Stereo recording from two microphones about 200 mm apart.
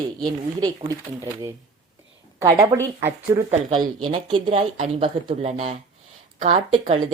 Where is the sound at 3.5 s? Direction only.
30° right (ahead or behind).